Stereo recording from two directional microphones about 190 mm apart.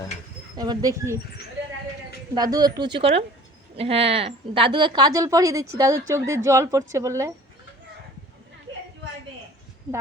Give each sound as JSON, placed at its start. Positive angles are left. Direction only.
{"t": 0.5, "sound": "a woman's voice", "side_deg": -20}
{"t": 2.3, "sound": "a woman's voice", "side_deg": -20}